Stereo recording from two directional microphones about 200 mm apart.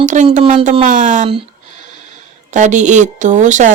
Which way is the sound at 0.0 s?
40° right (ahead or behind).